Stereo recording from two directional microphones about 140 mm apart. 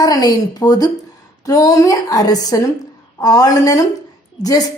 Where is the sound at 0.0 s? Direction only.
30° left (ahead or behind).